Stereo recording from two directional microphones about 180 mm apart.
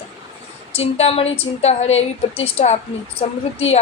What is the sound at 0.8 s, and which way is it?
A woman's voice, 35° left (ahead or behind).